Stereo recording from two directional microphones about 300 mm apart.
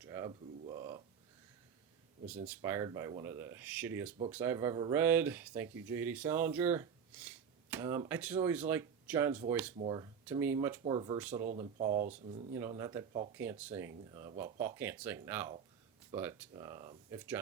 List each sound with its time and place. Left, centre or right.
0.1 s a sound: centre
2.2 s speech: centre
9.7 s speech: centre
11.2 s speech: centre
11.4 s speech: right
12.5 s speech: centre